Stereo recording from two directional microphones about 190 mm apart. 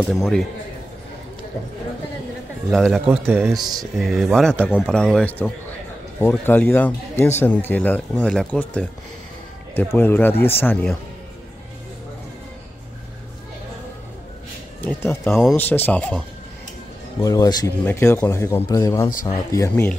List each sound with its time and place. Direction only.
0.1 s speech: centre (ahead or behind)
2.7 s speech: centre (ahead or behind)
9.9 s speech: 10° left (ahead or behind)
14.8 s speech: 10° left (ahead or behind)
17.2 s speech: 20° left (ahead or behind)